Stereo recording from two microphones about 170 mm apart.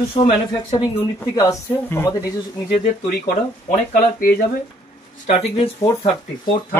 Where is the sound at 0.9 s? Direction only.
15° left (ahead or behind).